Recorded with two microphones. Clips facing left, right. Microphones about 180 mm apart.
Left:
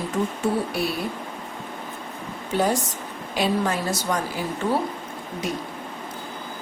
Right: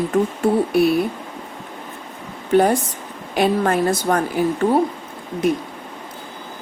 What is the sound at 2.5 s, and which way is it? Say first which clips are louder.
Speech: right 7 dB; 55° right (ahead or behind).